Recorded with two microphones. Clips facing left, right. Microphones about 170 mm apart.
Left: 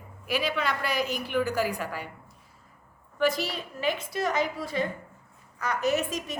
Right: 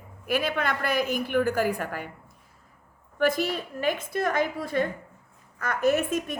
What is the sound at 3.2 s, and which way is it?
A woman's voice, 50° right (ahead or behind).